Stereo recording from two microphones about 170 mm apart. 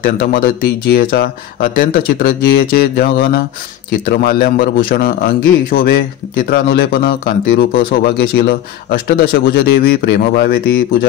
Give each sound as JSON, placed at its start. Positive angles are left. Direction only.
{"t": 0.0, "sound": "speech", "side_deg": 60}